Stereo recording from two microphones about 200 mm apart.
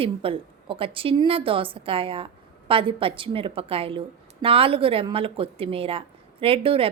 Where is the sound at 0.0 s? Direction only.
25° right (ahead or behind).